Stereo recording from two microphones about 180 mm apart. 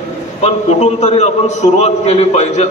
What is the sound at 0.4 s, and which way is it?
A man's voice, 35° left (ahead or behind).